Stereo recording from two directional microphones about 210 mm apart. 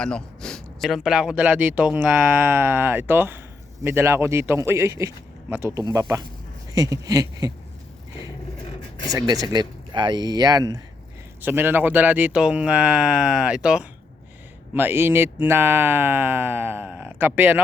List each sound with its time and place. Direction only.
0.0 s speech: 5° left (ahead or behind); by 7.5 s 15° right (ahead or behind)
9.1 s speech: 20° right (ahead or behind)